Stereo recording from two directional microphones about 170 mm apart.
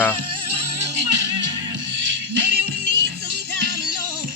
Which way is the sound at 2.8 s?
65° right (ahead or behind).